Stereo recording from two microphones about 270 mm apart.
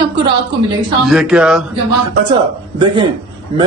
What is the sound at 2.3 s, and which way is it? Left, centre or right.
Speech, centre.